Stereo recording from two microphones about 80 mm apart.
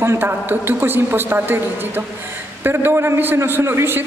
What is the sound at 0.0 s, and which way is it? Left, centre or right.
A man's voice, right.